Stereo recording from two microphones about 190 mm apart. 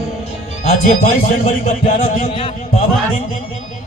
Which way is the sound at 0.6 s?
40° left (ahead or behind).